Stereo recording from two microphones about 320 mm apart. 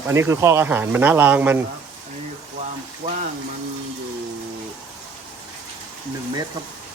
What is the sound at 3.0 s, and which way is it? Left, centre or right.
Speech, centre.